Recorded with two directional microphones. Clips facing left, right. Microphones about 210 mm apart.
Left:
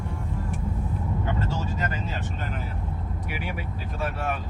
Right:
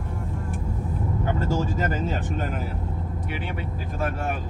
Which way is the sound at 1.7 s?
45° right (ahead or behind).